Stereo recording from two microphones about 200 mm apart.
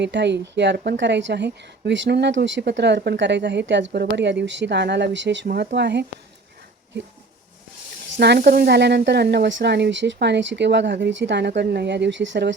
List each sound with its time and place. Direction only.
0.0 s a woman's voice: 60° right (ahead or behind)
8.1 s a woman's voice: 60° right (ahead or behind)